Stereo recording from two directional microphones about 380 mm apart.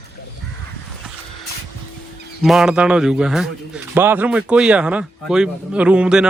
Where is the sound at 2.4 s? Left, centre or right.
Centre.